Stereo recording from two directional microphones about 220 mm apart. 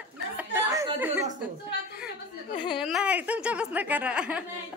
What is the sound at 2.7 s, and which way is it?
A woman's voice, centre (ahead or behind).